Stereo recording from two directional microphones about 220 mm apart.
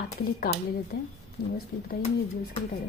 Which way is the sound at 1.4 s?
85° left.